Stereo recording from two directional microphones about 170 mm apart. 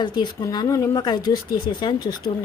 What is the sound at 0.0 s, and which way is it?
A woman's voice, 25° left (ahead or behind).